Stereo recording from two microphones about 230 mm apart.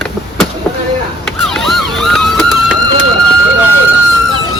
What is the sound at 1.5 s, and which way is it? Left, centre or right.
Emergency vehicle, centre.